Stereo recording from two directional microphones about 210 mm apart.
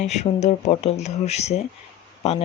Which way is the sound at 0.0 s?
35° left (ahead or behind).